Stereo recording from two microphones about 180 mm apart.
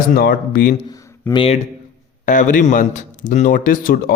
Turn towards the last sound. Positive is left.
turn(degrees=50)  # may be behind; listen again after turning